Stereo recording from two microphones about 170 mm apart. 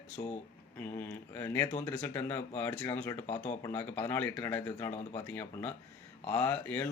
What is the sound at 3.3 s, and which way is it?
Speech, 25° left (ahead or behind).